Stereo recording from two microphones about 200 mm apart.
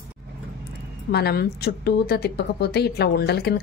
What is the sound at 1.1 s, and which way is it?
Speech, 55° left (ahead or behind).